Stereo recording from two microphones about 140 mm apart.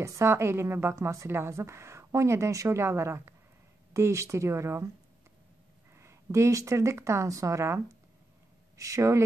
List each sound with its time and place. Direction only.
0.0 s a woman's voice: 20° right (ahead or behind)
5.9 s a woman's voice: 20° right (ahead or behind)